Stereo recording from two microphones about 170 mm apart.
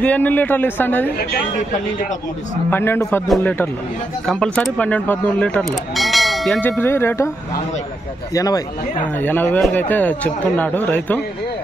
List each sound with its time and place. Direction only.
0.0 s speech: 10° left (ahead or behind)
2.7 s speech: 15° left (ahead or behind)
4.3 s speech: 5° left (ahead or behind)
8.4 s speech: 20° left (ahead or behind)
9.2 s speech: 10° left (ahead or behind)